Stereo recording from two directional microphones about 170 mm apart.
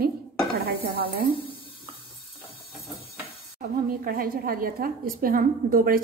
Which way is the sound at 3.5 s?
60° right (ahead or behind).